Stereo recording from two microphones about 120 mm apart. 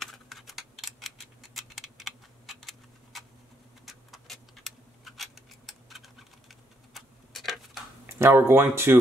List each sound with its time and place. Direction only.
0.0 s typing: centre (ahead or behind)
3.8 s a sound: centre (ahead or behind)
6.9 s tick-tock: centre (ahead or behind)
8.1 s speech: 20° right (ahead or behind)